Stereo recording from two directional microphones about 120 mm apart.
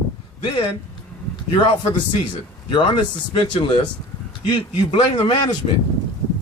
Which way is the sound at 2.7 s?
40° left (ahead or behind).